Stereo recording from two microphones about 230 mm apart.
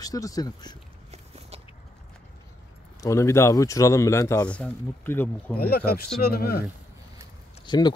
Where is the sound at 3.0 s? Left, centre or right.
Centre.